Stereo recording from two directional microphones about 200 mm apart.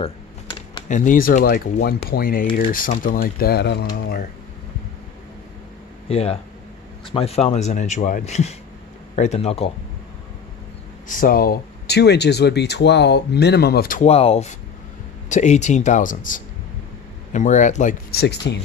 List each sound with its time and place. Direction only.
0.0 s a sound: 20° left (ahead or behind)
0.8 s speech: 40° left (ahead or behind)
6.0 s a man's voice: 30° left (ahead or behind)
11.1 s speech: 45° left (ahead or behind)
14.0 s a man's voice: 30° left (ahead or behind)
18.1 s speech: 55° left (ahead or behind)